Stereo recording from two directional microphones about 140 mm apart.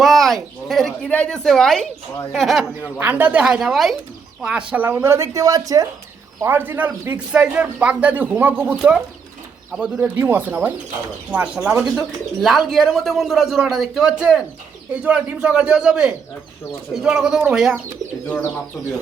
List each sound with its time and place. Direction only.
0.0 s speech: centre (ahead or behind)
3.0 s a man's voice: 10° right (ahead or behind)